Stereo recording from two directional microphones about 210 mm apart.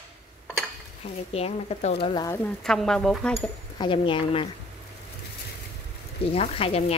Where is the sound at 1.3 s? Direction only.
30° left (ahead or behind).